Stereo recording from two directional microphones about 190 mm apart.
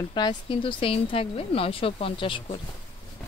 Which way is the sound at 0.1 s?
25° left (ahead or behind).